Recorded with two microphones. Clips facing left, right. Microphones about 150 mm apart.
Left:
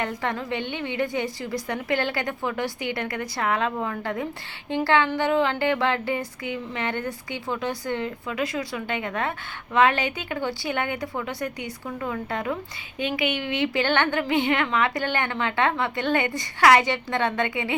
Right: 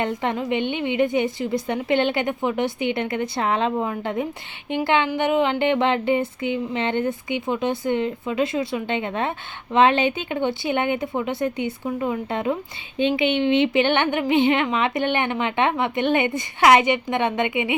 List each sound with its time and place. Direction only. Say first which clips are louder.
0.0 s speech: right 4 dB; 20° right (ahead or behind)